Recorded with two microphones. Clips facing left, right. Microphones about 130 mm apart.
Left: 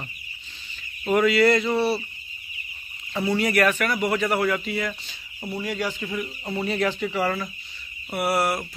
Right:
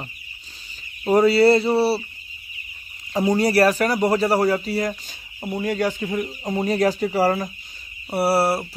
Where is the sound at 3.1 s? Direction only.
40° right (ahead or behind).